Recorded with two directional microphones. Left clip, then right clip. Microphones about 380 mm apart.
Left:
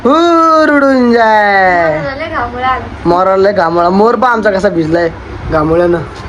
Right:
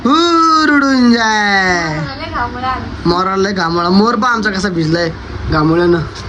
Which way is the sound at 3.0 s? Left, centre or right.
Centre.